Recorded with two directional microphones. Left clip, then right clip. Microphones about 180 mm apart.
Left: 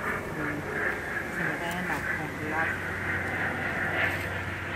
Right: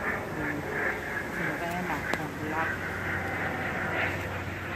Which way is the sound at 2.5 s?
5° left (ahead or behind).